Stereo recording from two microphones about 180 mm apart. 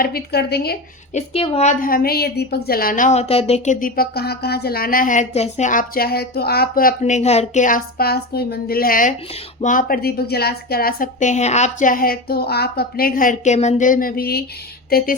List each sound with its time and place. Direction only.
0.0 s speech: 60° left (ahead or behind)
1.1 s a woman's voice: 35° left (ahead or behind)
1.8 s speech: 55° left (ahead or behind); by 3.8 s 35° left (ahead or behind)
3.8 s speech: 55° left (ahead or behind)
7.0 s speech: 40° left (ahead or behind); by 15.1 s 55° left (ahead or behind)